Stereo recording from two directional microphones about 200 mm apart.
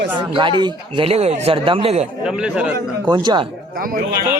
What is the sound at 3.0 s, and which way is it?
Speech, 25° right (ahead or behind).